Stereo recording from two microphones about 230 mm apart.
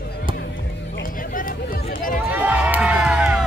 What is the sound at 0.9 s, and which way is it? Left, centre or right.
Music, left.